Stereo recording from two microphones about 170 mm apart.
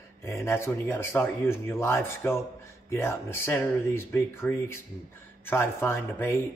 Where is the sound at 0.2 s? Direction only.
15° left (ahead or behind).